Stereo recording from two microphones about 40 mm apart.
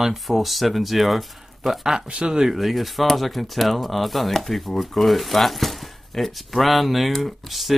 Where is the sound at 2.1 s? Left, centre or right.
Right.